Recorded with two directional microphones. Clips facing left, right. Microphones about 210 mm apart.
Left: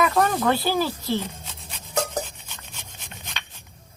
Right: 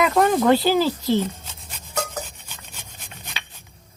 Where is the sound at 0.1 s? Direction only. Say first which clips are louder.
Right 5 dB; 10° right (ahead or behind).